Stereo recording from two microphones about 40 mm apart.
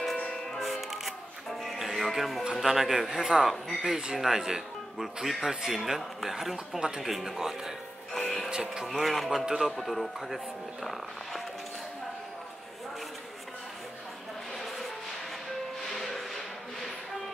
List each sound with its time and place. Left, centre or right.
0.5 s music: centre
2.6 s a man's voice: centre
8.1 s music: centre
8.5 s speech: centre
8.8 s speech: centre
15.9 s music: centre